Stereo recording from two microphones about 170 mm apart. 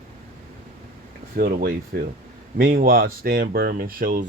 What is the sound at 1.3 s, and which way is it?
Speech, 60° right (ahead or behind).